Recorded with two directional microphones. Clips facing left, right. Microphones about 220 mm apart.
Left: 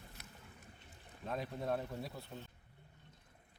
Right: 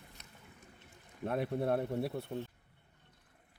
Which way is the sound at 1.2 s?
60° right (ahead or behind).